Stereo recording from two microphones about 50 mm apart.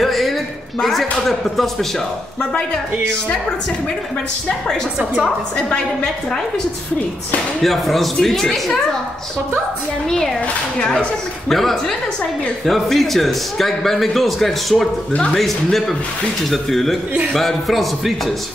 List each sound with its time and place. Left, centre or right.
0.0 s a sound: centre
0.8 s a man's voice: centre
7.6 s a man's voice: centre
10.0 s speech: centre
11.4 s a man's voice: centre